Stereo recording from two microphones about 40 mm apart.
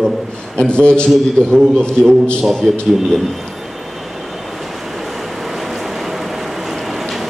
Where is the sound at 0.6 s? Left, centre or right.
Left.